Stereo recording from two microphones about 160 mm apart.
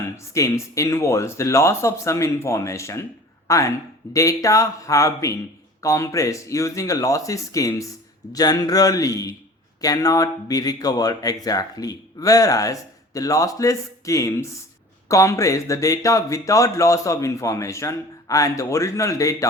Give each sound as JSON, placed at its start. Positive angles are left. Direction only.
{"t": 0.3, "sound": "speech", "side_deg": 20}